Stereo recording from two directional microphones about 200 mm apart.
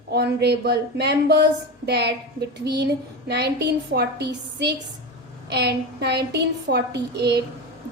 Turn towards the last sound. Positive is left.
turn(degrees=-55)  # may be behind; listen again after turning